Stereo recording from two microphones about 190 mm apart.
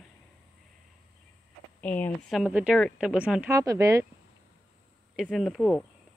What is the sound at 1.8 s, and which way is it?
Speech, 10° left (ahead or behind).